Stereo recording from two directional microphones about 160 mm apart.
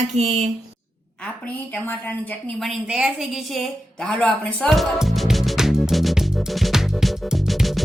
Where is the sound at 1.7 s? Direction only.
10° left (ahead or behind).